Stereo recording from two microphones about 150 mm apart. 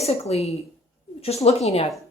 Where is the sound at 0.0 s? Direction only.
45° left (ahead or behind).